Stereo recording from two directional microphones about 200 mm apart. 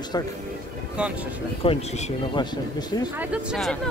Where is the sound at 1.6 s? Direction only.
30° left (ahead or behind).